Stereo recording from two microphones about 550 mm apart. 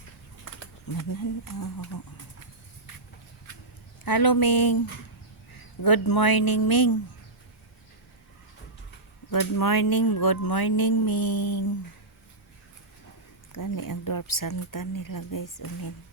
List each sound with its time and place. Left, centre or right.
0.9 s speech: left
4.0 s speech: left
9.3 s speech: left
13.5 s speech: left